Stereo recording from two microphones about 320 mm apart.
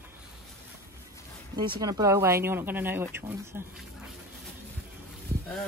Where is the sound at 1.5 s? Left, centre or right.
Centre.